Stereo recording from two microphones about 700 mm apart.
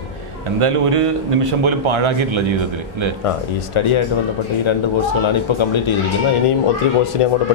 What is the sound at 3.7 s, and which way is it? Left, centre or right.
Speech, left.